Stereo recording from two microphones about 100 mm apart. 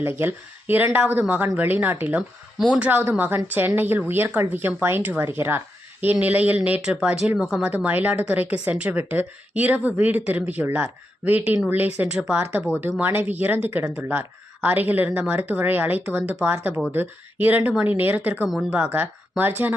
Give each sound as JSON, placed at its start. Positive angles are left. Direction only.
{"t": 0.0, "sound": "a woman's voice", "side_deg": -20}
{"t": 7.9, "sound": "a woman's voice", "side_deg": -15}